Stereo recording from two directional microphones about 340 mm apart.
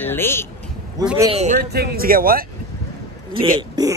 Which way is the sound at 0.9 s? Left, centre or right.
Centre.